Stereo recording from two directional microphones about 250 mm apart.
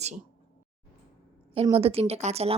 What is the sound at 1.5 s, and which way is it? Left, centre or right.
A woman's voice, right.